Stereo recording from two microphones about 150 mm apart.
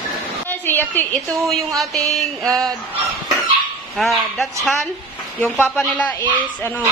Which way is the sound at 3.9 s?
Centre (ahead or behind).